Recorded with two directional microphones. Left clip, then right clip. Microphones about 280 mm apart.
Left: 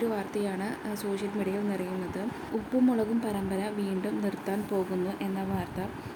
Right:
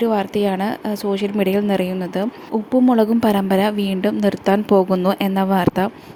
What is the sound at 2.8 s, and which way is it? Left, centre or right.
A woman's voice, right.